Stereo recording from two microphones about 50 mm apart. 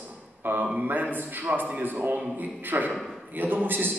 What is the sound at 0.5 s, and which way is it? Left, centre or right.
A man's voice, right.